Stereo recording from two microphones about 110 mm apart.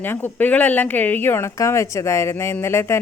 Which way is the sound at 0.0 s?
20° left (ahead or behind).